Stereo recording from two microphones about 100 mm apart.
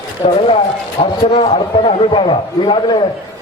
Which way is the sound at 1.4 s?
55° left (ahead or behind).